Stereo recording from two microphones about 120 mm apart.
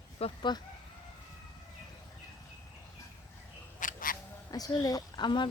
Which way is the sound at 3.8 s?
90° left.